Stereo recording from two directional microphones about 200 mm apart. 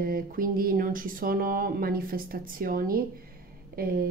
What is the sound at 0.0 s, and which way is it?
A woman's voice, 45° right (ahead or behind).